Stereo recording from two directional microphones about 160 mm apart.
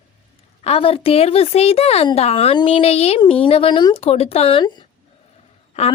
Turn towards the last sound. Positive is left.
turn(degrees=45)  # may be behind; listen again after turning